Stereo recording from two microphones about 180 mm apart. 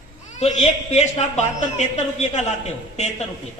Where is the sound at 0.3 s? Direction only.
40° left (ahead or behind).